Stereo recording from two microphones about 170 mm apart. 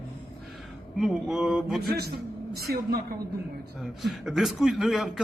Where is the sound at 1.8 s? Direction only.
70° right (ahead or behind).